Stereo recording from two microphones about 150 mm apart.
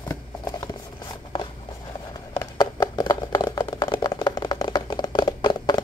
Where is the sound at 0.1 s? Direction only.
25° left (ahead or behind).